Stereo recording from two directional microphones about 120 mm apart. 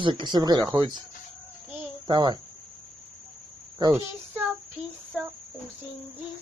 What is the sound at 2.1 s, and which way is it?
Speech, 35° right (ahead or behind).